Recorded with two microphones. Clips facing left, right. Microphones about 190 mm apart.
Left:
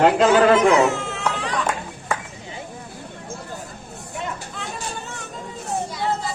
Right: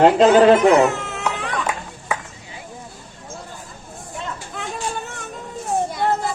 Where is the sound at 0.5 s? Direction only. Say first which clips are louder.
Right 2 dB; 55° right (ahead or behind).